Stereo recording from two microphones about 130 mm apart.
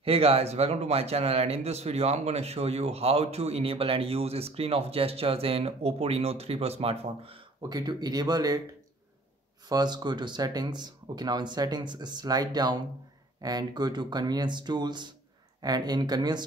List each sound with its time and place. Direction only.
0.0 s a man's voice: 50° right (ahead or behind)
7.7 s speech: 30° right (ahead or behind)
9.7 s speech: 30° right (ahead or behind)